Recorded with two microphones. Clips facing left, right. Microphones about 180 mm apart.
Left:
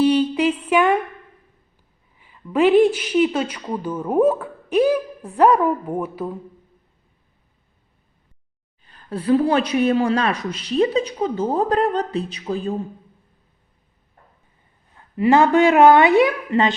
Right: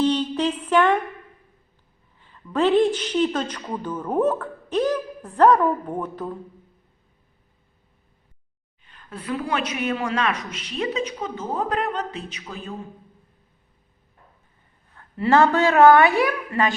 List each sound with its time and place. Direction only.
0.0 s a sound: 10° left (ahead or behind)
2.1 s a woman's voice: 10° left (ahead or behind)
8.8 s speech: 35° left (ahead or behind)
14.9 s a woman's voice: 15° left (ahead or behind)